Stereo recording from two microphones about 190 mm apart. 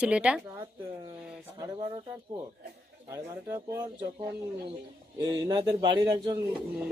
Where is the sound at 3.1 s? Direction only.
15° right (ahead or behind).